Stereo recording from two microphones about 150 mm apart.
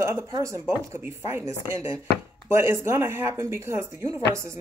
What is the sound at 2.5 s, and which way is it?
Speech, 15° right (ahead or behind).